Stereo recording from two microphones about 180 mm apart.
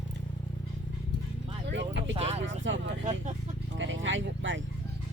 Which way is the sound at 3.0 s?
40° right (ahead or behind).